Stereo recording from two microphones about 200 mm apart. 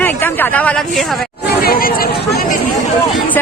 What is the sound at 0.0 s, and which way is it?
Speech, 10° left (ahead or behind).